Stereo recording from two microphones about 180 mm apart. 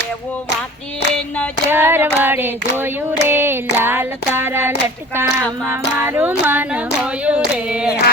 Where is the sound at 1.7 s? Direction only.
10° right (ahead or behind).